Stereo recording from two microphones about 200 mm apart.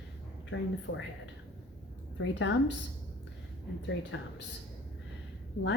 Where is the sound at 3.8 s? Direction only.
65° left (ahead or behind).